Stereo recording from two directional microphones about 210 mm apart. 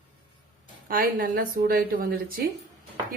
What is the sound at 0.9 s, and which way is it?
Speech, 45° right (ahead or behind).